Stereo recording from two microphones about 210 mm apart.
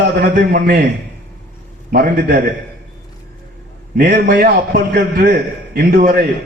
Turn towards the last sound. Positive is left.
turn(degrees=-45)  # may be behind; listen again after turning